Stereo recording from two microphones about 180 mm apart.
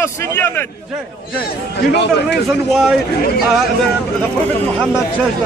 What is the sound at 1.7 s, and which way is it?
Speech, 65° left (ahead or behind).